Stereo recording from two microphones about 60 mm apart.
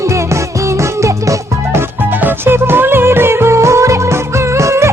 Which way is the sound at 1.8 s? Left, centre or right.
Right.